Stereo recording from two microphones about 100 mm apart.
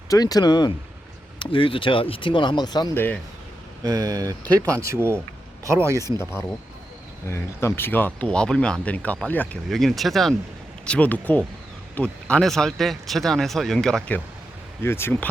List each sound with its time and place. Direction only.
0.1 s speech: 40° left (ahead or behind)
1.4 s speech: 60° left (ahead or behind)
2.9 s speech: 20° left (ahead or behind)
3.8 s speech: 35° right (ahead or behind)
7.3 s speech: 25° left (ahead or behind)
9.6 s speech: centre (ahead or behind)
10.8 s speech: 15° left (ahead or behind)
14.8 s speech: 25° left (ahead or behind)